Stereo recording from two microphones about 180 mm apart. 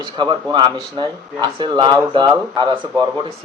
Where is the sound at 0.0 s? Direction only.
25° right (ahead or behind).